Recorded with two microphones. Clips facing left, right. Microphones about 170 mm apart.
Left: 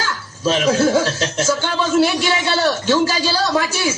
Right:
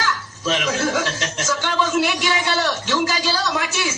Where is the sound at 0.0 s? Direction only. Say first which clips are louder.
Left 3 dB; 30° left (ahead or behind).